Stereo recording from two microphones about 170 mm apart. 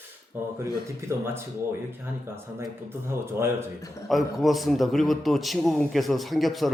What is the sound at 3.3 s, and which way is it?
Speech, 15° right (ahead or behind).